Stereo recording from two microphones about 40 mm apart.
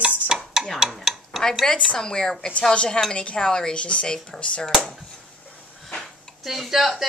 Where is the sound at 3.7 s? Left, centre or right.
Left.